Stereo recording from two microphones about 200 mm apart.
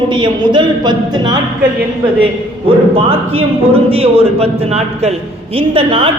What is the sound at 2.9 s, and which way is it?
Speech, 30° right (ahead or behind).